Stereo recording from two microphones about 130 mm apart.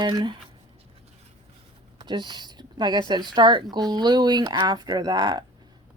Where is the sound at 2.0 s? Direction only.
35° right (ahead or behind).